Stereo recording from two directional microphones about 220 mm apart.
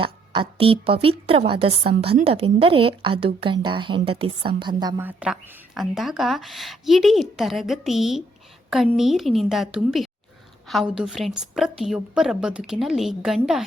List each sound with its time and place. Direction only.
0.0 s a woman's voice: 25° right (ahead or behind); by 13.7 s centre (ahead or behind)